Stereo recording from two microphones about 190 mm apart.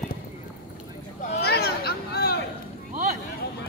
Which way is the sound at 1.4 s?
55° left (ahead or behind).